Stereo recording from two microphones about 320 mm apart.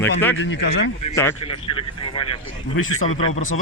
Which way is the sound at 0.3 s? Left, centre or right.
Left.